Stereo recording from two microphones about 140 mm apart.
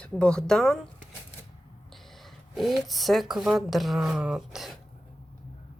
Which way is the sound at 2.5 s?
Centre (ahead or behind).